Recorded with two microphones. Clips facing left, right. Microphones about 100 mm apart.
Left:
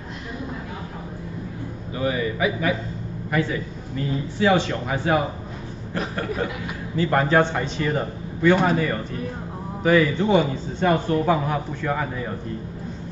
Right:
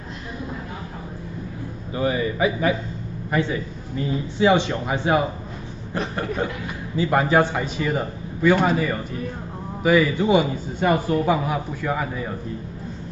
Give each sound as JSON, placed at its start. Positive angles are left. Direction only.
{"t": 2.0, "sound": "a man's voice", "side_deg": -30}
{"t": 6.4, "sound": "a man's voice", "side_deg": -25}
{"t": 7.0, "sound": "a man's voice", "side_deg": -10}